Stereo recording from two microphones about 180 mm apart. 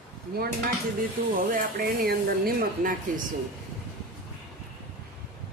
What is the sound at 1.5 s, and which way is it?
Speech, 55° right (ahead or behind).